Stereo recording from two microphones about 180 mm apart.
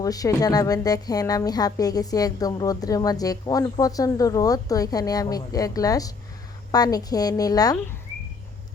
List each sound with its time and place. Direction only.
0.0 s a woman's voice: 20° left (ahead or behind)